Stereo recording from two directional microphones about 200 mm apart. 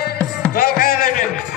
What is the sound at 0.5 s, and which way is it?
Music, 50° left (ahead or behind).